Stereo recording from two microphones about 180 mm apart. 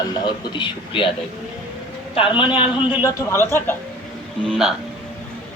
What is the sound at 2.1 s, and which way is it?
Speech, 30° left (ahead or behind).